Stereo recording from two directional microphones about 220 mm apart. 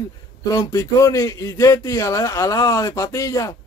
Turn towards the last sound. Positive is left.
turn(degrees=15)  # may be behind; listen again after turning